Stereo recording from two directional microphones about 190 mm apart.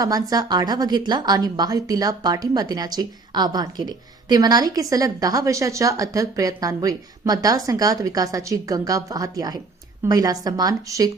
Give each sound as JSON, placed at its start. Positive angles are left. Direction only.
{"t": 0.0, "sound": "a woman's voice", "side_deg": -20}